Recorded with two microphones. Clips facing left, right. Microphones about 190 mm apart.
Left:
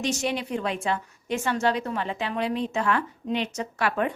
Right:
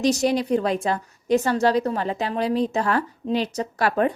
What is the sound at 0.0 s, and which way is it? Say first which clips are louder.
A woman's voice: right 7 dB; 35° right (ahead or behind).